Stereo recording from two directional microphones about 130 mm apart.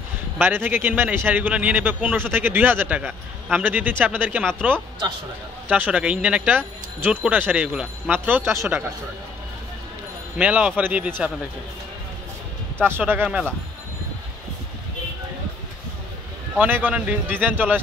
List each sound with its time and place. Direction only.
0.4 s a man's voice: 15° right (ahead or behind)
5.7 s a man's voice: 10° right (ahead or behind)
10.3 s a man's voice: 10° right (ahead or behind)
12.8 s a man's voice: 15° right (ahead or behind)
16.5 s a man's voice: 15° right (ahead or behind)